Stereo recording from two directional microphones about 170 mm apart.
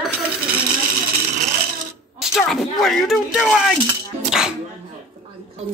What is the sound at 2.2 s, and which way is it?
Speech, centre (ahead or behind).